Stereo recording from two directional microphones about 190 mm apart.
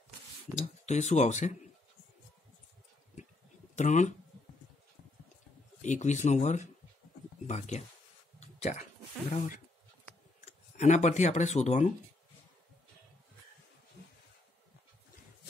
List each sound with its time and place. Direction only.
0.6 s speech: 35° left (ahead or behind)
3.7 s speech: 40° left (ahead or behind)
5.8 s speech: 40° left (ahead or behind)
8.4 s a sound: 35° left (ahead or behind)
10.4 s speech: 35° left (ahead or behind)